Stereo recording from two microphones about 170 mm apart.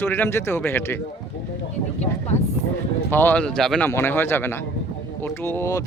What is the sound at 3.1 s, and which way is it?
Speech, 10° left (ahead or behind).